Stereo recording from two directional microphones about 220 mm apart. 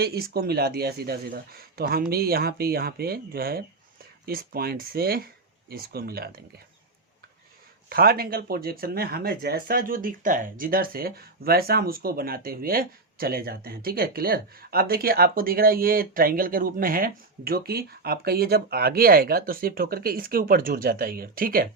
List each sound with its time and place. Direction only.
0.0 s speech: 45° right (ahead or behind)
7.9 s speech: 45° right (ahead or behind)